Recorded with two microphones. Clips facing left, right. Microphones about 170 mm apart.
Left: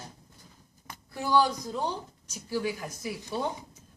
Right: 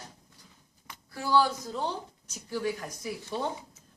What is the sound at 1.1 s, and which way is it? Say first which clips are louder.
A woman's voice: left 1 dB; 20° left (ahead or behind).